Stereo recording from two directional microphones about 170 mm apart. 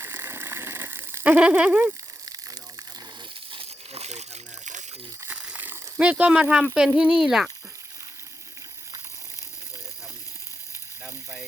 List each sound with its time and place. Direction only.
0.0 s ratchet: 15° right (ahead or behind)
3.5 s crumpling: 35° right (ahead or behind)
5.2 s speech: 10° right (ahead or behind)